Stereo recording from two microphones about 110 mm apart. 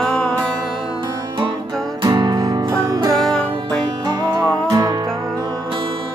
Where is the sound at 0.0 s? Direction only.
5° left (ahead or behind).